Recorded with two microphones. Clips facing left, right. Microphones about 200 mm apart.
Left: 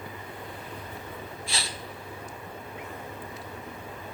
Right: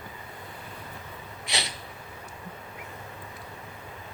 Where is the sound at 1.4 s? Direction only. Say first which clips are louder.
Right 5 dB; 20° right (ahead or behind).